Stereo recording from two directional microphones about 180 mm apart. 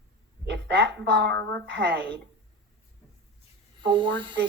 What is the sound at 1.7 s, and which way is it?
Speech, 70° right (ahead or behind).